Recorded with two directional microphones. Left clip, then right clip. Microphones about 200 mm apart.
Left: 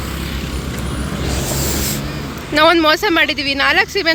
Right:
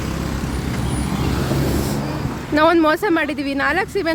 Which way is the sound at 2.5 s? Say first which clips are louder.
Left 3 dB; 10° right (ahead or behind).